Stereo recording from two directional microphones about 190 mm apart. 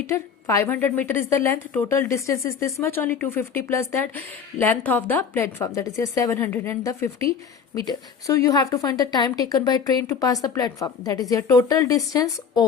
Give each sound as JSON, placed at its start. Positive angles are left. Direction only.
{"t": 0.1, "sound": "a woman's voice", "side_deg": 15}